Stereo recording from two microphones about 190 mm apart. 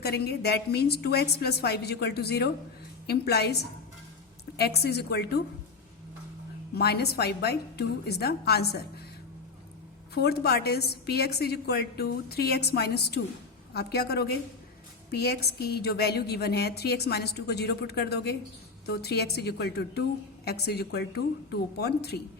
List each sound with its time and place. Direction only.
0.0 s a woman's voice: 60° left (ahead or behind)
6.7 s a woman's voice: 55° left (ahead or behind)
10.2 s a woman's voice: 55° left (ahead or behind)